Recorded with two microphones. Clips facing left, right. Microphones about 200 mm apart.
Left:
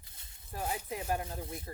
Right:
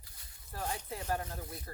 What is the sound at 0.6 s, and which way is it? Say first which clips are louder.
Speech: left 2 dB; 10° left (ahead or behind).